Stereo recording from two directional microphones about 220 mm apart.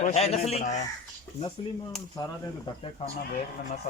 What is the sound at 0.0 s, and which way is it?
Speech, 30° left (ahead or behind).